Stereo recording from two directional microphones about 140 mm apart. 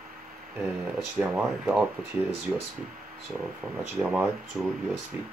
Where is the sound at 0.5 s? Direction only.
15° right (ahead or behind).